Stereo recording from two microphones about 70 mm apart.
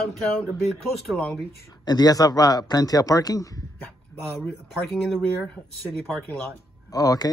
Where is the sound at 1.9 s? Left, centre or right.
Left.